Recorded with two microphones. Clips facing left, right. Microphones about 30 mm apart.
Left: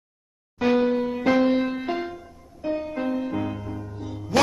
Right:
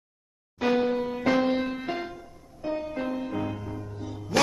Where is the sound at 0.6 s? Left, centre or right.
Centre.